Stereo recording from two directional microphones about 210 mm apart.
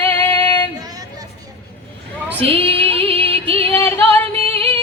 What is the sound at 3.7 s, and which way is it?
Female singing, 10° left (ahead or behind).